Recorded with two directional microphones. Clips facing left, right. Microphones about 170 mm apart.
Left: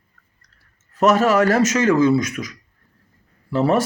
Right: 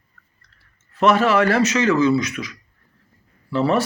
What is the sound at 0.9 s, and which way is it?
Speech, 45° left (ahead or behind).